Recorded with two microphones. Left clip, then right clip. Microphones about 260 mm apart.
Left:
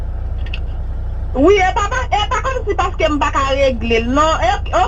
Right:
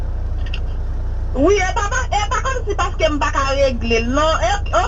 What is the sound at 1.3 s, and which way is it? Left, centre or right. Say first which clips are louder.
Speech: left 4 dB; left.